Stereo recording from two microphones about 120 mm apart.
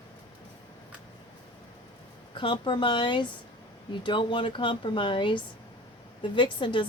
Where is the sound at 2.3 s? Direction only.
45° left (ahead or behind).